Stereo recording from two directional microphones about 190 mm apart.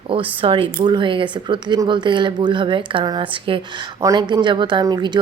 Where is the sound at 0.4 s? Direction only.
25° right (ahead or behind).